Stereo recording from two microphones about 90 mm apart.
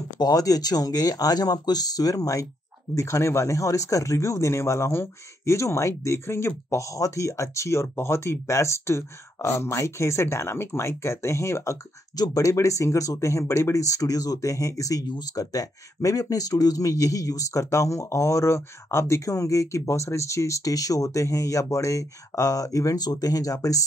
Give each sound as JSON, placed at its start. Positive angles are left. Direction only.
{"t": 0.2, "sound": "speech", "side_deg": 45}